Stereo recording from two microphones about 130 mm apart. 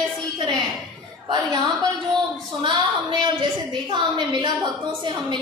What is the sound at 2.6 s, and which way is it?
Speech, 35° right (ahead or behind).